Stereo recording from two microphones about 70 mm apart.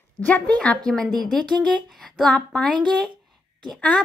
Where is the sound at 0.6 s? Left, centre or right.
Centre.